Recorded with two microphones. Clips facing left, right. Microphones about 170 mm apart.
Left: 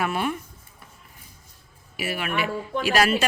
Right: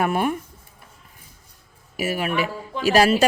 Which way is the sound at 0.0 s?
50° right (ahead or behind).